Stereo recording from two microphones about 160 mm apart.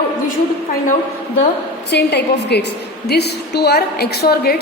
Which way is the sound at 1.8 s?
90° left.